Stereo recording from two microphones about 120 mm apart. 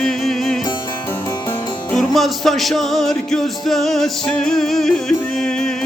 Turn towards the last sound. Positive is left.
turn(degrees=5)  # may be behind; listen again after turning